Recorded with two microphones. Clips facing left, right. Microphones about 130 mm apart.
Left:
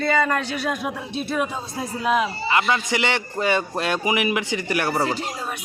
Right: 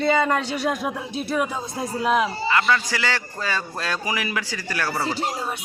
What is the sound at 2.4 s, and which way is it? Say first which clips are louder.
A man's voice: even; 20° left (ahead or behind).